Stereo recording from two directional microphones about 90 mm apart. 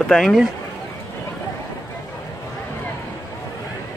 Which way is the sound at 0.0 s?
5° left (ahead or behind).